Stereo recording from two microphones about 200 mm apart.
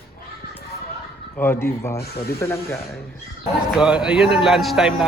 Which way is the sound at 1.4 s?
10° left (ahead or behind).